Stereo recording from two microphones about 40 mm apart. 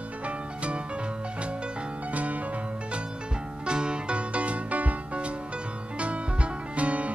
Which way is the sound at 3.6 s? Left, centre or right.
Right.